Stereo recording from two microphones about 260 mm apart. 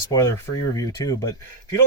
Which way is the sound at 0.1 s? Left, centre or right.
Centre.